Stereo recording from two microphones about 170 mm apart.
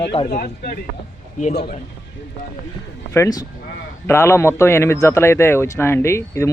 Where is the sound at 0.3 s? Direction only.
65° left (ahead or behind).